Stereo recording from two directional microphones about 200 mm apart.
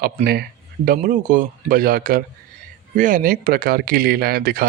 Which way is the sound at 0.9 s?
40° right (ahead or behind).